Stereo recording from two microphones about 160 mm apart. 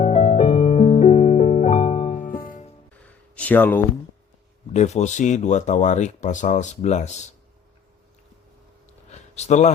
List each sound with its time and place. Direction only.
0.0 s music: 40° left (ahead or behind); by 2.6 s 60° left (ahead or behind)
3.3 s speech: 10° left (ahead or behind)
4.7 s speech: 45° left (ahead or behind)
9.0 s a sound: 45° left (ahead or behind)